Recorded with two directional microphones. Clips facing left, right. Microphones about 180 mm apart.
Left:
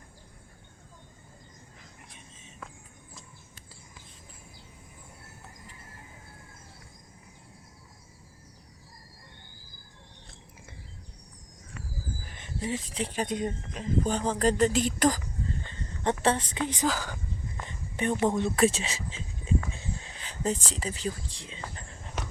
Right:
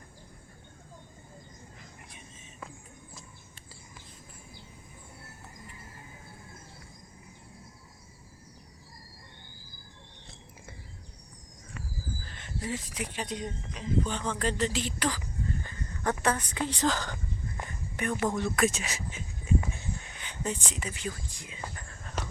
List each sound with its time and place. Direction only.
12.2 s speech: 15° left (ahead or behind)
13.2 s speech: 50° left (ahead or behind)
15.4 s a sound: 25° left (ahead or behind)
16.2 s a woman's voice: 25° left (ahead or behind)
16.8 s speech: 10° left (ahead or behind)
17.7 s speech: 25° left (ahead or behind)
19.7 s a sound: 25° left (ahead or behind)